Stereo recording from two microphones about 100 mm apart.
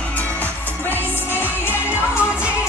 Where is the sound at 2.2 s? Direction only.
10° right (ahead or behind).